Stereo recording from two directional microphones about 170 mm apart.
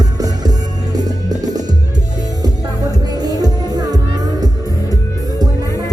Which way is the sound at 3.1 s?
20° right (ahead or behind).